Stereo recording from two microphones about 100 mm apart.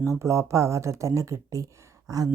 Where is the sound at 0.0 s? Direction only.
30° right (ahead or behind).